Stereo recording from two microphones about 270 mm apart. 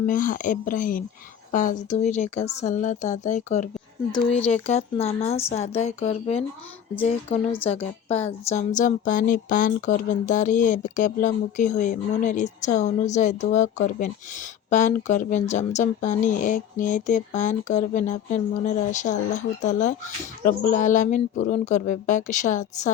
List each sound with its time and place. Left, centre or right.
0.0 s a woman's voice: left